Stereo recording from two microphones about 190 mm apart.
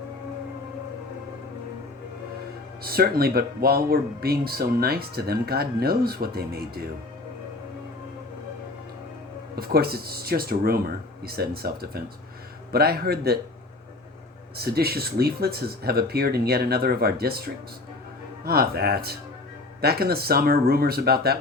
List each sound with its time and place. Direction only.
2.8 s speech: 55° right (ahead or behind)
9.6 s speech: 55° right (ahead or behind)
14.5 s speech: 55° right (ahead or behind)